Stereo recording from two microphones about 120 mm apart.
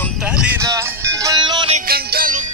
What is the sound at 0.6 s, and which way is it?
Music, 25° right (ahead or behind).